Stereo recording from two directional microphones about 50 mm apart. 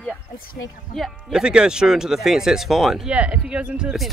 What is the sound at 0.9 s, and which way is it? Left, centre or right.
Speech, centre.